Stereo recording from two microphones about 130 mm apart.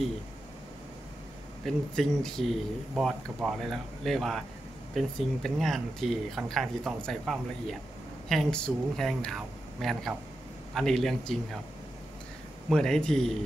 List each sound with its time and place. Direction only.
1.6 s speech: centre (ahead or behind)
12.6 s speech: 5° left (ahead or behind)